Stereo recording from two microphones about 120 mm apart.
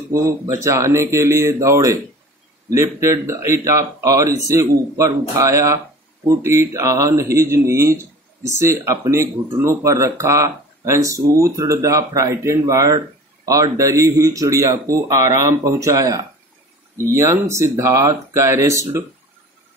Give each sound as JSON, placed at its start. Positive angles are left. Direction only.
{"t": 0.1, "sound": "speech", "side_deg": -25}